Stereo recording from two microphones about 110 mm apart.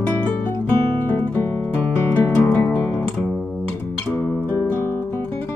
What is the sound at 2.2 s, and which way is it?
Music, 25° left (ahead or behind).